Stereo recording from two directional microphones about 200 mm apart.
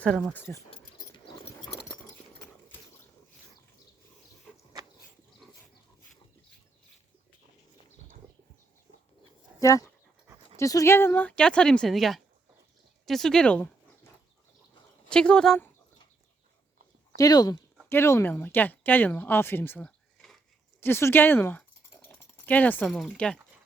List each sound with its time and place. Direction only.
0.0 s speech: 5° left (ahead or behind)
0.7 s a sound: 25° left (ahead or behind)
2.0 s a sound: 10° left (ahead or behind)
9.6 s dog: 15° left (ahead or behind)
10.6 s speech: 15° left (ahead or behind)
15.1 s speech: 5° left (ahead or behind)
17.2 s speech: 20° left (ahead or behind)